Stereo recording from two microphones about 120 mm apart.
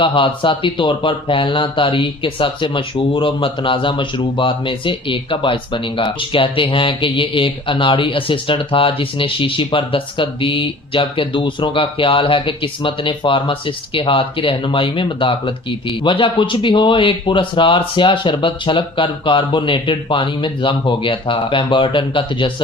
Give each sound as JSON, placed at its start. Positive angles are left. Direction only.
{"t": 0.0, "sound": "speech", "side_deg": 45}